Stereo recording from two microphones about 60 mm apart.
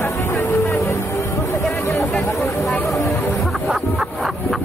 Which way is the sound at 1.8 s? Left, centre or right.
Left.